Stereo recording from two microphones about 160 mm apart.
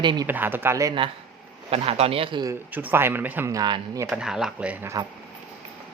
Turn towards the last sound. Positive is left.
turn(degrees=-15)  # may be behind; listen again after turning